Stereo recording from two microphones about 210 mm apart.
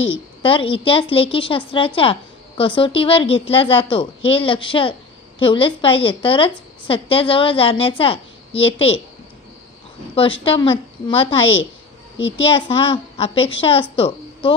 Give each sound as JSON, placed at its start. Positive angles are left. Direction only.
{"t": 0.0, "sound": "a woman's voice", "side_deg": 25}
{"t": 10.1, "sound": "a woman's voice", "side_deg": 25}
{"t": 12.4, "sound": "a woman's voice", "side_deg": 25}